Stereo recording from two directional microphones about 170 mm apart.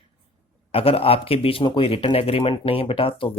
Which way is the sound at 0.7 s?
35° left (ahead or behind).